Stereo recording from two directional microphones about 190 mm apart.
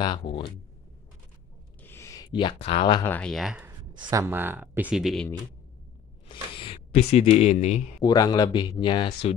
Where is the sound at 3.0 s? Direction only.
5° left (ahead or behind).